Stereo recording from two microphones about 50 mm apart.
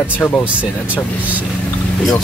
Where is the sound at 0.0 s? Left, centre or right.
Left.